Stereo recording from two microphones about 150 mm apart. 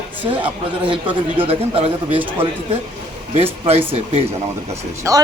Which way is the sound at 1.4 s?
40° right (ahead or behind).